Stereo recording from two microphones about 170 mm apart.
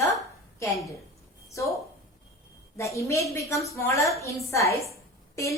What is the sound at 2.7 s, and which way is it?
A woman's voice, 15° left (ahead or behind).